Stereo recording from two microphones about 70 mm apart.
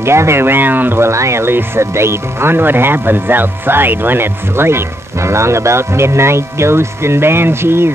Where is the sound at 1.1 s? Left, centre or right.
Right.